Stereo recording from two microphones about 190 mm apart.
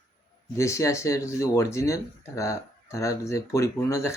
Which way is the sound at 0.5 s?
15° left (ahead or behind).